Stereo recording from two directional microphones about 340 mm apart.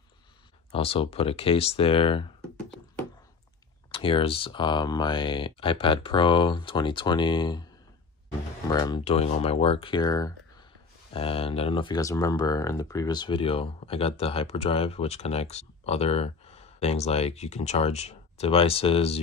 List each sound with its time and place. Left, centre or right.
0.7 s speech: centre
3.9 s speech: centre
8.6 s speech: centre